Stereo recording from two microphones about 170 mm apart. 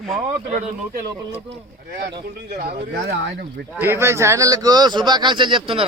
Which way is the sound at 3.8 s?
15° right (ahead or behind).